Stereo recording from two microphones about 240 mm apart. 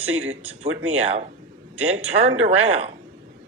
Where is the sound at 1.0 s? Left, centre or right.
Right.